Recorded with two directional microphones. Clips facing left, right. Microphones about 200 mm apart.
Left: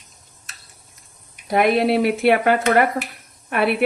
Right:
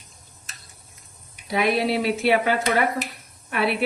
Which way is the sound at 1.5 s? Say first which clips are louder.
Left 5 dB; 55° left (ahead or behind).